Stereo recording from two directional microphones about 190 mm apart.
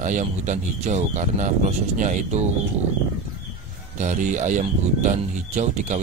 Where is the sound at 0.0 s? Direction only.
40° right (ahead or behind).